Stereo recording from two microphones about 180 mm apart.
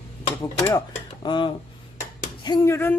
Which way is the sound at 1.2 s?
25° left (ahead or behind).